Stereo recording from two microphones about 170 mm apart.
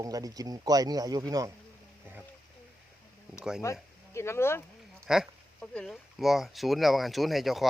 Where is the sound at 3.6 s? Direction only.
15° left (ahead or behind).